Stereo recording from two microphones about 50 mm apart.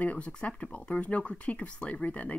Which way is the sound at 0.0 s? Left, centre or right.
Left.